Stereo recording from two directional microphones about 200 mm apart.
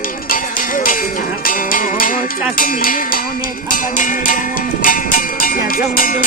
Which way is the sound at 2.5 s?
45° left (ahead or behind).